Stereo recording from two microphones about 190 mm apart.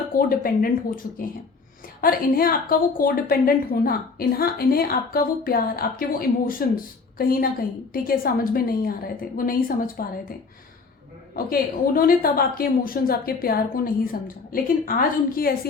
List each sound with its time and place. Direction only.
0.1 s a woman's voice: 50° left (ahead or behind)
11.9 s a woman's voice: 50° left (ahead or behind)